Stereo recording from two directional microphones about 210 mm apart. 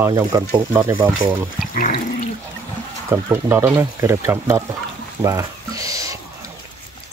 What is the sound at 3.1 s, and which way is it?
Speech, 10° right (ahead or behind).